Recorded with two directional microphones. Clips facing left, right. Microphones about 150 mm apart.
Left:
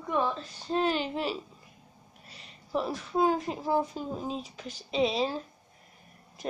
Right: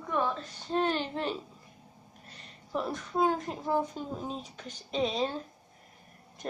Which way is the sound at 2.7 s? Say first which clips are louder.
Left 2 dB; 5° left (ahead or behind).